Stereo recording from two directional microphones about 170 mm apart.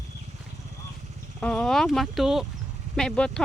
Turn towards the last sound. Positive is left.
turn(degrees=5)  # may be behind; listen again after turning